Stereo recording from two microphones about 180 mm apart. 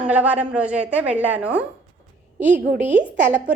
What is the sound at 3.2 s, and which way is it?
Speech, 75° right (ahead or behind).